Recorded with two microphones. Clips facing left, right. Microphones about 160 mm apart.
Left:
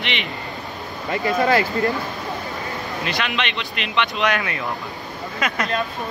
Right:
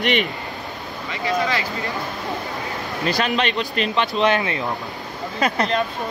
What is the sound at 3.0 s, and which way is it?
A man's voice, 40° right (ahead or behind).